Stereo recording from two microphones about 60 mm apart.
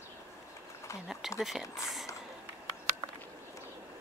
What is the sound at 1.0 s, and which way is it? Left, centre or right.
Speech, centre.